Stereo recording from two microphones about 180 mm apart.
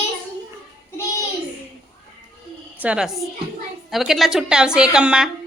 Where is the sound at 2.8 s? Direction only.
5° right (ahead or behind).